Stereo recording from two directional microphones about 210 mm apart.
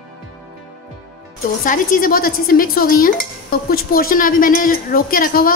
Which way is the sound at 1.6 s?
40° left (ahead or behind).